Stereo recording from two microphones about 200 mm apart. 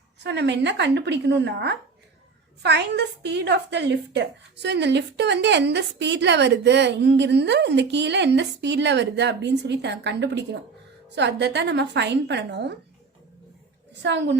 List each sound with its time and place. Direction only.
0.2 s a woman's voice: 60° right (ahead or behind)
14.0 s a woman's voice: 60° right (ahead or behind)